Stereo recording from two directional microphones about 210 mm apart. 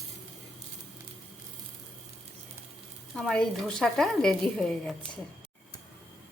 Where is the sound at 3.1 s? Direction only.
5° left (ahead or behind).